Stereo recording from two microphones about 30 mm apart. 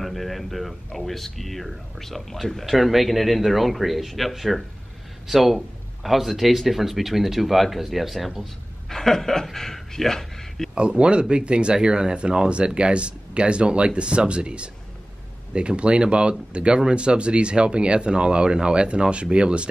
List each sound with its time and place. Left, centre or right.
0.0 s speech: centre
8.8 s speech: centre
10.7 s speech: right